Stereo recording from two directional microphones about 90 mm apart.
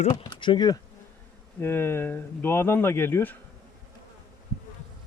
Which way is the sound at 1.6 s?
25° left (ahead or behind).